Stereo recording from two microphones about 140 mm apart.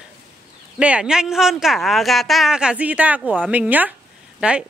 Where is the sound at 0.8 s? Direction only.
10° right (ahead or behind).